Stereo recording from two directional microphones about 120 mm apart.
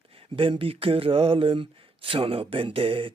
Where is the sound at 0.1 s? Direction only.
50° right (ahead or behind).